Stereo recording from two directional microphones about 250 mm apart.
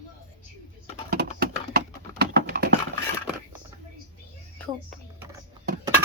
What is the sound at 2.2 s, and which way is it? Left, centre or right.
Typing, right.